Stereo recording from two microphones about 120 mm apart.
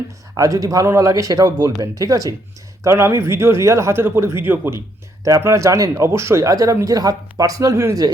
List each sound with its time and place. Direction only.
0.3 s speech: 30° right (ahead or behind)